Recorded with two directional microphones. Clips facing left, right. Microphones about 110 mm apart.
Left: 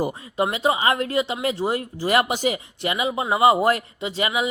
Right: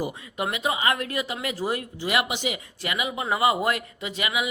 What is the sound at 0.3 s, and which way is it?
Speech, 30° left (ahead or behind).